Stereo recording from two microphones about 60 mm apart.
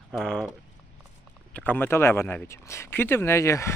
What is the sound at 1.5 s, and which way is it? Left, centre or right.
Speech, left.